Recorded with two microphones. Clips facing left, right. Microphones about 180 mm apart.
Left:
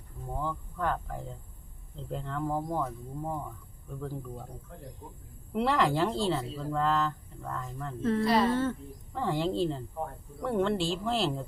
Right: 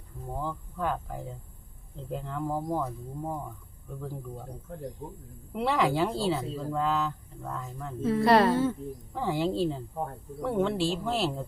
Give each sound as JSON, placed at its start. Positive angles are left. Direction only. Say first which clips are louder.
{"t": 0.3, "sound": "speech", "louder": "even", "side_deg": -10}
{"t": 5.5, "sound": "speech", "louder": "even", "side_deg": -5}
{"t": 8.2, "sound": "a woman's voice", "louder": "right 5 dB", "side_deg": -65}
{"t": 9.1, "sound": "speech", "louder": "right 1 dB", "side_deg": -5}